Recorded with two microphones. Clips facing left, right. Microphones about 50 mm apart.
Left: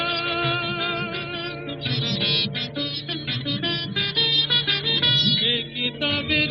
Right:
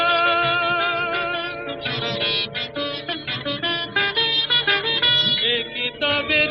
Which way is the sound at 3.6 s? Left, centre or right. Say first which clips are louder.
Right 8 dB; right.